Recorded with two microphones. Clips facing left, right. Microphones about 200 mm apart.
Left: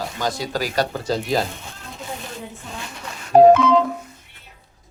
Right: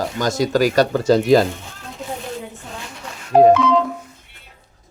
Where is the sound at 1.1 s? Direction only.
65° right (ahead or behind).